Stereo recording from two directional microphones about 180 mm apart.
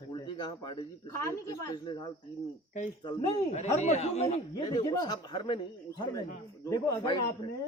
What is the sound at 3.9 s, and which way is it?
Speech, 35° left (ahead or behind).